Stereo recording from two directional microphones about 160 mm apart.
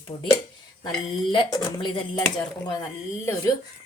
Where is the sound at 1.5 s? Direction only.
30° left (ahead or behind).